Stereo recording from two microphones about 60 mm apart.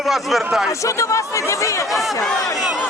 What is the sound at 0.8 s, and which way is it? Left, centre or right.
Speech, left.